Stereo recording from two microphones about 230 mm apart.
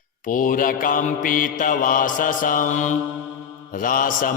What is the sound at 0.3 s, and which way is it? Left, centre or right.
Mantra, left.